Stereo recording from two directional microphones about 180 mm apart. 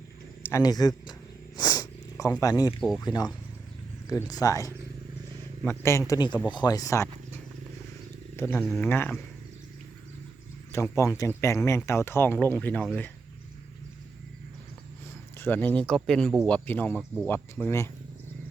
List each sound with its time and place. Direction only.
0.4 s speech: 20° left (ahead or behind)
1.5 s sniff: 20° left (ahead or behind)
3.0 s speech: 20° left (ahead or behind)
8.4 s speech: 10° left (ahead or behind)
10.7 s speech: 15° left (ahead or behind)
15.4 s speech: 10° left (ahead or behind)